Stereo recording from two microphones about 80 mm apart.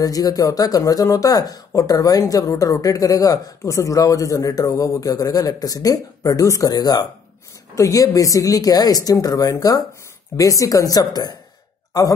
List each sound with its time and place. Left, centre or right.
0.0 s speech: left
7.7 s speech: left